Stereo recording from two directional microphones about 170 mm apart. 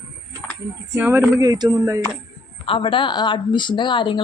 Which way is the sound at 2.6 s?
30° left (ahead or behind).